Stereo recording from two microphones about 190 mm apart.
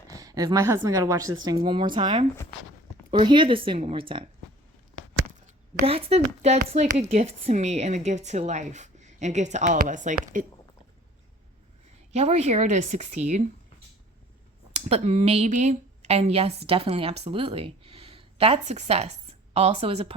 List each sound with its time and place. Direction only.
0.1 s a woman's voice: 20° right (ahead or behind)
5.8 s a woman's voice: 30° right (ahead or behind)
12.1 s a woman's voice: 35° right (ahead or behind)
14.7 s speech: 35° right (ahead or behind)